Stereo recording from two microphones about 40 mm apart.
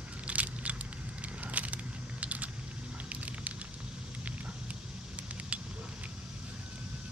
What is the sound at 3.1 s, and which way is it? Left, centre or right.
Fire, right.